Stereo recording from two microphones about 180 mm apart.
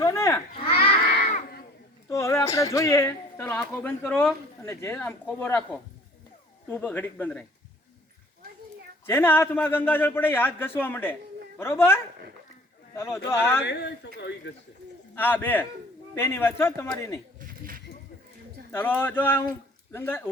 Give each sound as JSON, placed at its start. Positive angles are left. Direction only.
{"t": 0.0, "sound": "children playing", "side_deg": 20}
{"t": 1.0, "sound": "a sound", "side_deg": 50}
{"t": 2.0, "sound": "a sound", "side_deg": 15}
{"t": 3.8, "sound": "a man's voice", "side_deg": 10}
{"t": 9.0, "sound": "a man's voice", "side_deg": 15}
{"t": 12.9, "sound": "a man's voice", "side_deg": 15}
{"t": 13.7, "sound": "speech", "side_deg": 70}
{"t": 15.1, "sound": "a man's voice", "side_deg": 10}
{"t": 18.7, "sound": "a man's voice", "side_deg": 10}